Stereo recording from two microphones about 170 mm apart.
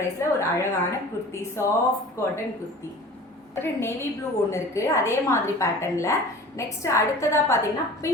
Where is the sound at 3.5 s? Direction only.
15° left (ahead or behind).